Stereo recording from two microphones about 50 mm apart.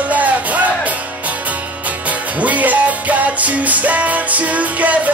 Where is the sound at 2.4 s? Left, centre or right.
Right.